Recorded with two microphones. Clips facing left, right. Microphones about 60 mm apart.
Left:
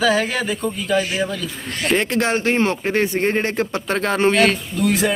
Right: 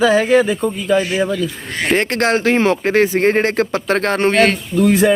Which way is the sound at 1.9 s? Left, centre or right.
Right.